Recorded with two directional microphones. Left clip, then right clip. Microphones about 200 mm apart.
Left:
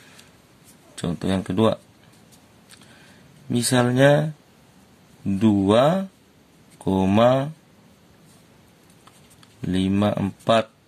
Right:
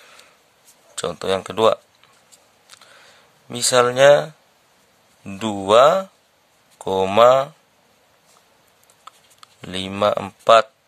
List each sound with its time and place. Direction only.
0.9 s speech: 40° right (ahead or behind)
3.4 s speech: 35° right (ahead or behind)
9.6 s speech: 35° right (ahead or behind)